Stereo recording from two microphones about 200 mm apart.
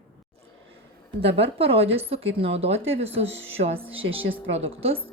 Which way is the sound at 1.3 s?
30° right (ahead or behind).